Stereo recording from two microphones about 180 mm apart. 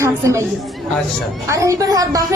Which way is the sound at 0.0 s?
15° right (ahead or behind).